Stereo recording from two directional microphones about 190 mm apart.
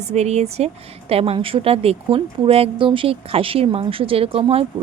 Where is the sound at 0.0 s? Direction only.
35° right (ahead or behind).